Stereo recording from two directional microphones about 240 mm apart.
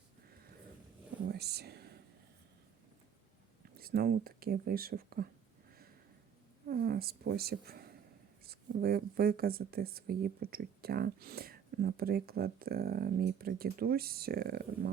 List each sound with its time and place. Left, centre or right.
1.3 s a sound: right
3.8 s speech: right
6.7 s speech: right